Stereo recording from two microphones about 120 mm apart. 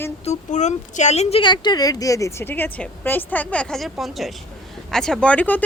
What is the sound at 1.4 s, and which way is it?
Speech, 40° left (ahead or behind).